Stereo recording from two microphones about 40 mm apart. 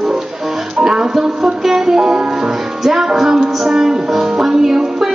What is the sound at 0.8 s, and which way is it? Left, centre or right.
Speech, centre.